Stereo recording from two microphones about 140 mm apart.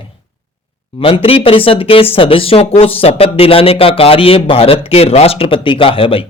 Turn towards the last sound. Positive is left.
turn(degrees=40)  # may be behind; listen again after turning